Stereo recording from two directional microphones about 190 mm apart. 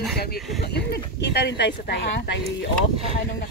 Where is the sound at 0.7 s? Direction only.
60° left (ahead or behind).